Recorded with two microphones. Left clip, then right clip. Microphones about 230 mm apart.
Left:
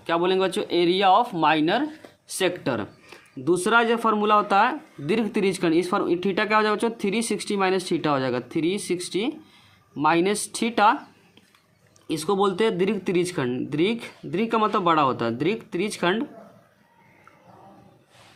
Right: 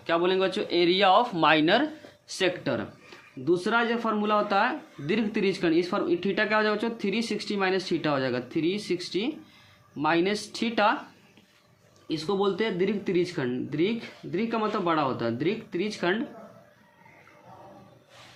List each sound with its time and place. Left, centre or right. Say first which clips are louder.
0.0 s speech: left 2 dB; left
12.0 s speech: left 4 dB; left